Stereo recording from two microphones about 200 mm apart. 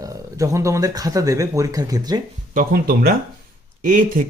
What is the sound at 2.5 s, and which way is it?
Speech, 45° right (ahead or behind).